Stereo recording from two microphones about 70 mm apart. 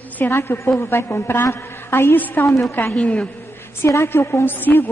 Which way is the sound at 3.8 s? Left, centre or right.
Left.